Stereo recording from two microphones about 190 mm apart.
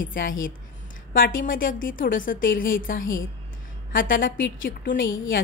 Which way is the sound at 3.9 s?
45° left (ahead or behind).